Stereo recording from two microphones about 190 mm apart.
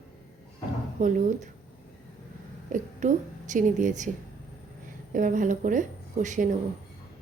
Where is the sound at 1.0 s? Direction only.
40° right (ahead or behind).